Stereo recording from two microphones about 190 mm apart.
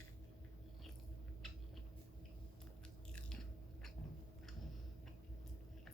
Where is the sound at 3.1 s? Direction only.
5° left (ahead or behind).